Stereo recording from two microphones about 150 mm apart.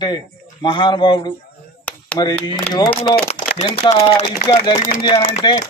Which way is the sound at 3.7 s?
35° left (ahead or behind).